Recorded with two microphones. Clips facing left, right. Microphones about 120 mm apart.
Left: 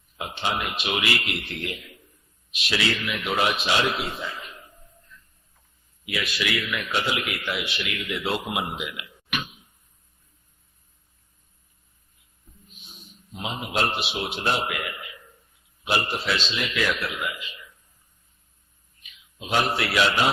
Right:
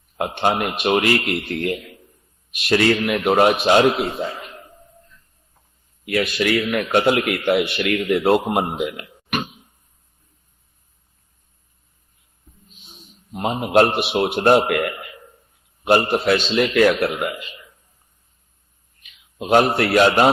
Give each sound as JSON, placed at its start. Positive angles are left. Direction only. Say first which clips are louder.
{"t": 0.3, "sound": "a man's voice", "louder": "right 7 dB", "side_deg": -55}
{"t": 6.1, "sound": "a man's voice", "louder": "right 9 dB", "side_deg": -50}
{"t": 12.5, "sound": "music", "louder": "right 2 dB", "side_deg": 0}
{"t": 13.3, "sound": "speech", "louder": "right 12 dB", "side_deg": -50}
{"t": 14.7, "sound": "a sound", "louder": "right 10 dB", "side_deg": -55}
{"t": 15.8, "sound": "a man's voice", "louder": "right 10 dB", "side_deg": -50}
{"t": 19.4, "sound": "a man's voice", "louder": "right 9 dB", "side_deg": -50}